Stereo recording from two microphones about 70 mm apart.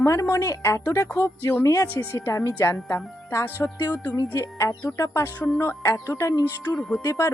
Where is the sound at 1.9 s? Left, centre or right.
Left.